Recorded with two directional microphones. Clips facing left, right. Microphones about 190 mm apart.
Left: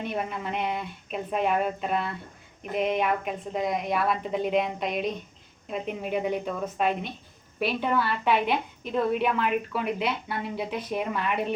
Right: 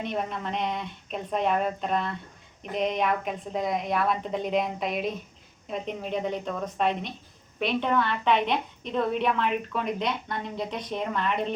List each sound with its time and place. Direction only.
0.0 s a woman's voice: 5° left (ahead or behind)